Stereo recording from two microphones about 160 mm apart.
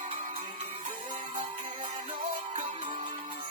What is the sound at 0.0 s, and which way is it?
Music, 50° right (ahead or behind).